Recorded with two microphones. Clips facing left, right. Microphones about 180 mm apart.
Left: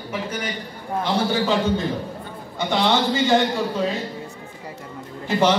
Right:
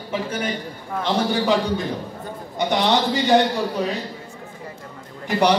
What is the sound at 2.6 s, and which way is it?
Speech, 20° right (ahead or behind).